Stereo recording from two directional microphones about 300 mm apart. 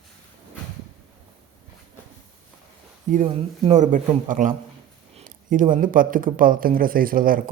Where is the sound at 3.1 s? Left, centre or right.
Right.